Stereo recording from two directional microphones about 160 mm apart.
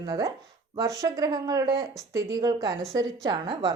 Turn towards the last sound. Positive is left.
turn(degrees=-25)  # may be behind; listen again after turning